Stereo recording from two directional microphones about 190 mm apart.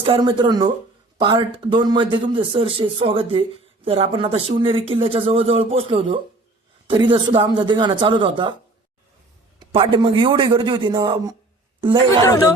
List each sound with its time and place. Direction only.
0.0 s speech: 25° right (ahead or behind)
9.6 s speech: 30° right (ahead or behind)
12.2 s speech: 20° left (ahead or behind)